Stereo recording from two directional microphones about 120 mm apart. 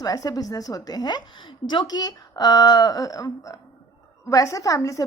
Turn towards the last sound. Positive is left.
turn(degrees=30)  # may be behind; listen again after turning